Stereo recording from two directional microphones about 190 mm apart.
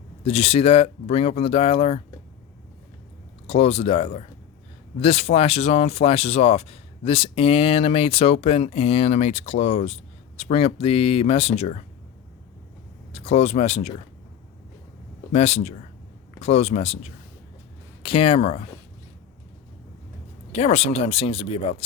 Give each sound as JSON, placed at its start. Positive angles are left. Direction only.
{"t": 0.3, "sound": "speech", "side_deg": 30}
{"t": 3.4, "sound": "speech", "side_deg": 30}
{"t": 13.1, "sound": "speech", "side_deg": 30}
{"t": 15.3, "sound": "speech", "side_deg": 35}
{"t": 20.5, "sound": "speech", "side_deg": 30}